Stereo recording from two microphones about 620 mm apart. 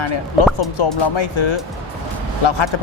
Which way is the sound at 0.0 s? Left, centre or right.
Left.